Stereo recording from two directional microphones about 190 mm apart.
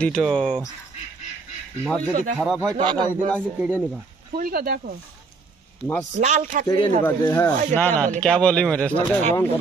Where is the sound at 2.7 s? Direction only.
25° right (ahead or behind).